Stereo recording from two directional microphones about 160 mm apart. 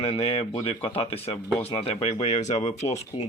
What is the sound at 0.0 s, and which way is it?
Speech, 40° left (ahead or behind).